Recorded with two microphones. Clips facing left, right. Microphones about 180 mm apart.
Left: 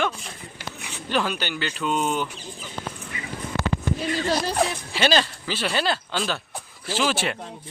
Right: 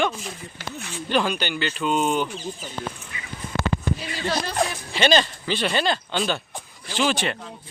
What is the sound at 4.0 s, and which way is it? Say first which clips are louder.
Speech: left 3 dB; 40° left (ahead or behind).